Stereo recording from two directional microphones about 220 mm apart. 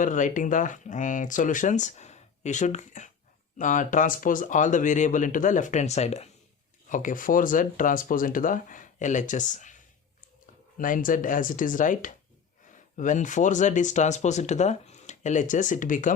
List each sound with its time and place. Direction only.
0.0 s speech: 35° left (ahead or behind)
10.8 s speech: 40° left (ahead or behind)